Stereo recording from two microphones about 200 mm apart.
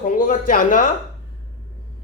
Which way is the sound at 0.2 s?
45° left (ahead or behind).